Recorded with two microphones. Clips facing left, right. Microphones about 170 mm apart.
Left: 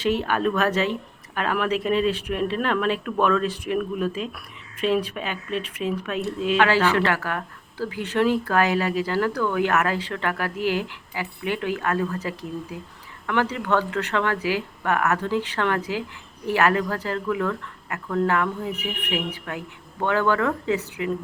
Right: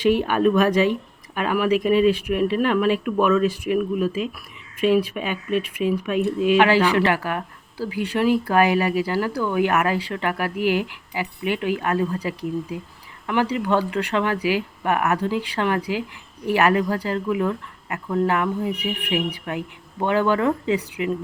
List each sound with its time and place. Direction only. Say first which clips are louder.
0.0 s speech: right 4 dB; 15° right (ahead or behind)